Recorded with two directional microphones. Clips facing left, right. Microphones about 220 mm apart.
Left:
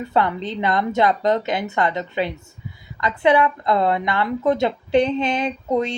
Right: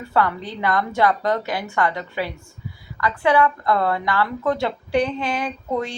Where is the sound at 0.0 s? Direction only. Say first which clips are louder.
Left 1 dB; 20° left (ahead or behind).